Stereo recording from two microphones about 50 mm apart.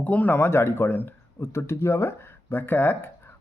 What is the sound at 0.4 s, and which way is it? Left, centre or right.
Speech, left.